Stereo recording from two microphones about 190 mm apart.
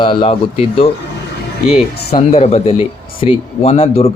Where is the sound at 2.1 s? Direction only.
35° left (ahead or behind).